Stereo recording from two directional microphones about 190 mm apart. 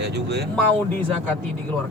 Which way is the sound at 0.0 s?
60° right (ahead or behind).